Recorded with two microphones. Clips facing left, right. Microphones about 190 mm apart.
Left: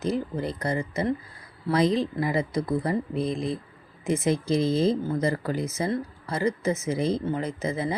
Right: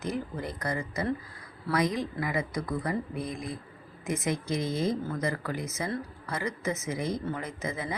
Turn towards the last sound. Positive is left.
turn(degrees=30)  # may be behind; listen again after turning